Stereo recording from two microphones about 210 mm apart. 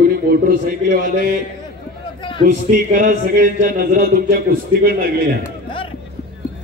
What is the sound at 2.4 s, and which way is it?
A man's voice, 40° right (ahead or behind).